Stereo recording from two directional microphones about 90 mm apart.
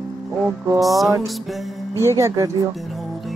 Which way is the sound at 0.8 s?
Centre (ahead or behind).